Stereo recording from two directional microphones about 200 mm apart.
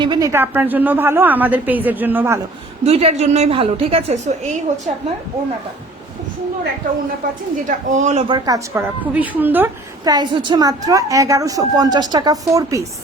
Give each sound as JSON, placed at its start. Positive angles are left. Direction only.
{"t": 0.0, "sound": "a woman's voice", "side_deg": -20}
{"t": 2.8, "sound": "a woman's voice", "side_deg": -30}
{"t": 7.9, "sound": "a woman's voice", "side_deg": -40}
{"t": 8.3, "sound": "a woman's voice", "side_deg": -15}
{"t": 10.0, "sound": "a woman's voice", "side_deg": -20}